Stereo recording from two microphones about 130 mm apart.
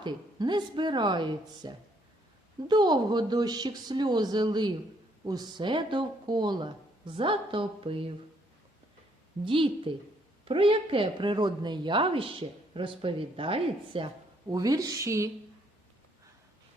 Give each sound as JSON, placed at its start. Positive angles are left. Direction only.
{"t": 0.0, "sound": "speech", "side_deg": -35}
{"t": 9.4, "sound": "a woman's voice", "side_deg": -40}
{"t": 14.4, "sound": "a woman's voice", "side_deg": -30}